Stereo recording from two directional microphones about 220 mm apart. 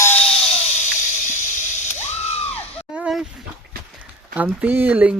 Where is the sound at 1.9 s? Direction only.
30° left (ahead or behind).